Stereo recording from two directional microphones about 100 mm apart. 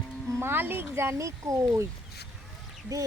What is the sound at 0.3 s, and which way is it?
Speech, 20° right (ahead or behind).